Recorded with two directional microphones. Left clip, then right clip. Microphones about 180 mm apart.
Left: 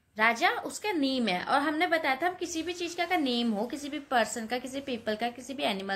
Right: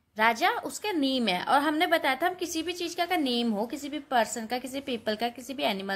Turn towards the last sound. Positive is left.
turn(degrees=-15)  # may be behind; listen again after turning